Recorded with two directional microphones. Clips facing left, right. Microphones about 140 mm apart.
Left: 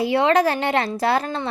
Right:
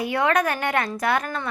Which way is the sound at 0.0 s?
25° left (ahead or behind).